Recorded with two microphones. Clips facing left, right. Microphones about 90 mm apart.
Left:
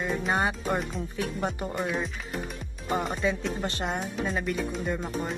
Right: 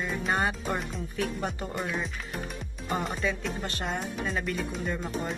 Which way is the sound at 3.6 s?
20° left (ahead or behind).